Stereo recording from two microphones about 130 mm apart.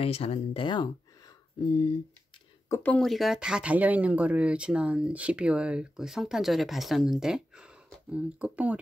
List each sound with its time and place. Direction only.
0.0 s speech: 50° left (ahead or behind)
2.7 s speech: 15° left (ahead or behind)
3.1 s speech: centre (ahead or behind)